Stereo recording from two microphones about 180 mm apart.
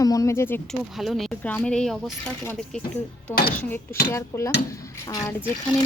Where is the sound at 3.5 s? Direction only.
10° left (ahead or behind).